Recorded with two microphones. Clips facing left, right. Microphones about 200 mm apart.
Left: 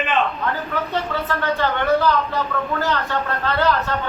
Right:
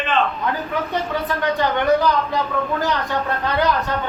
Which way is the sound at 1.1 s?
15° right (ahead or behind).